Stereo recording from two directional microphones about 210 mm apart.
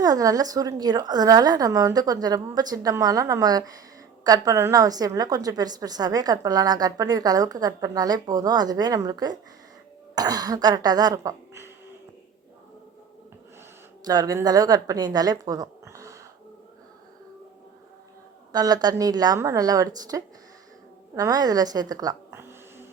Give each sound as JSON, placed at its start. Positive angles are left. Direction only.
{"t": 0.0, "sound": "a woman's voice", "side_deg": -15}
{"t": 14.0, "sound": "a woman's voice", "side_deg": -15}
{"t": 18.5, "sound": "a woman's voice", "side_deg": -20}